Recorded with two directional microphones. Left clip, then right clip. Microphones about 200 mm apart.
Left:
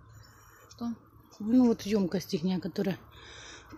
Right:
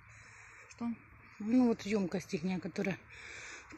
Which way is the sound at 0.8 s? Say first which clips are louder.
Left 3 dB; 30° right (ahead or behind).